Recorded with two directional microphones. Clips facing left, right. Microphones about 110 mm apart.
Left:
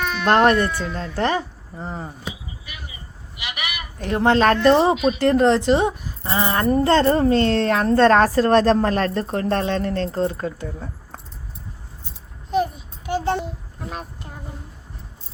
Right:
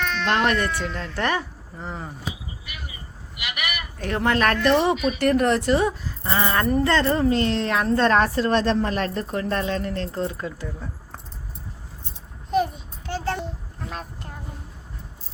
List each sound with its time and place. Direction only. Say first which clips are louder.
0.0 s baby cry: left 1 dB; 10° left (ahead or behind)
0.3 s speech: left 7 dB; 45° left (ahead or behind)
0.7 s speech: left 2 dB; 15° left (ahead or behind)
3.9 s a woman's voice: left 5 dB; 30° left (ahead or behind)
12.5 s a sound: left 1 dB; centre (ahead or behind)
13.1 s a sound: left 5 dB; 20° left (ahead or behind)